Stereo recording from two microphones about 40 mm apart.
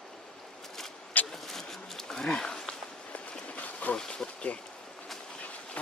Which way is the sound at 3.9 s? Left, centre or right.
Centre.